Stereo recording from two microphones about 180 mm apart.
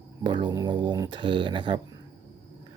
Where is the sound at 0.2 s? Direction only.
25° right (ahead or behind).